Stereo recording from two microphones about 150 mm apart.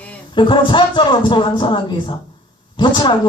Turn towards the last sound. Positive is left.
turn(degrees=30)  # may be behind; listen again after turning